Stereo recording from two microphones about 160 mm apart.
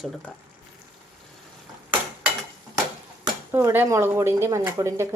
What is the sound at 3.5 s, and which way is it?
Speech, 15° right (ahead or behind).